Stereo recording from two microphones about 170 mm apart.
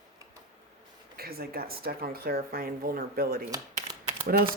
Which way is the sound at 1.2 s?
65° right (ahead or behind).